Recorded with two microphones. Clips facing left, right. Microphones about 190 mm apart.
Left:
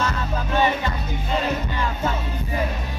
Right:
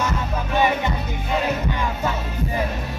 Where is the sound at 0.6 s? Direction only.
10° right (ahead or behind).